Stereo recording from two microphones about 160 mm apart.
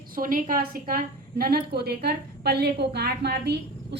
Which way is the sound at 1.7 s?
85° right.